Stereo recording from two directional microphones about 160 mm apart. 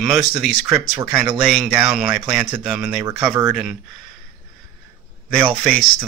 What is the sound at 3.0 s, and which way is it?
Speech, 20° right (ahead or behind).